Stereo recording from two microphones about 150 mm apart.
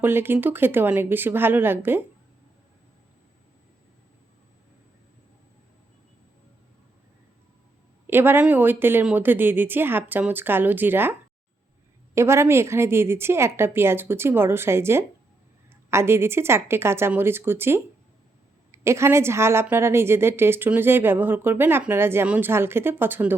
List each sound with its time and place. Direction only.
0.0 s a woman's voice: 15° right (ahead or behind)
8.0 s a woman's voice: 15° right (ahead or behind)
12.1 s a woman's voice: 20° right (ahead or behind)